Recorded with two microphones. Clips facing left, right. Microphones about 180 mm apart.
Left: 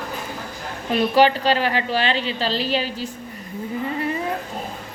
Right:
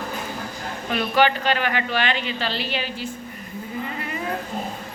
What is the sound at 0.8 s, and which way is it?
A woman's voice, 30° left (ahead or behind).